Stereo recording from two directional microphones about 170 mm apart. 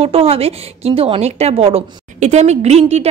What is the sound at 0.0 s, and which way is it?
A woman's voice, 35° right (ahead or behind).